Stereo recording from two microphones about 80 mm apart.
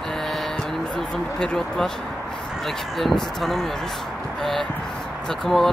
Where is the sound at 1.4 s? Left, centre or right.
Centre.